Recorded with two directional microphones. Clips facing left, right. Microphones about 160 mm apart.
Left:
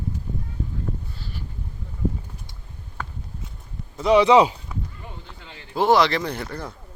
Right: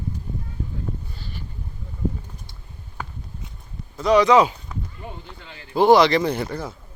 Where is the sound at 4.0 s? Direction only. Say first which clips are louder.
Even; 25° left (ahead or behind).